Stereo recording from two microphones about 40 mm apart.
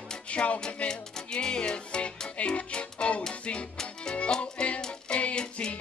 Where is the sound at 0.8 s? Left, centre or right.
Centre.